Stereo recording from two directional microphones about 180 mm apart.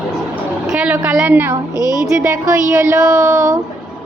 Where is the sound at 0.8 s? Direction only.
5° right (ahead or behind).